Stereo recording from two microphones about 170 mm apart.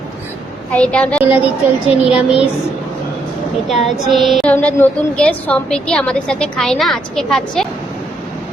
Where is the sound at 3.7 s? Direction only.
Centre (ahead or behind).